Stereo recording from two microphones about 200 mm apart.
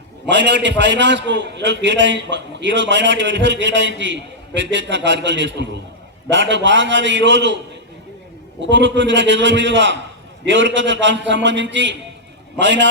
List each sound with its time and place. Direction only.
0.3 s a man's voice: 60° right (ahead or behind)
8.7 s a man's voice: 65° right (ahead or behind)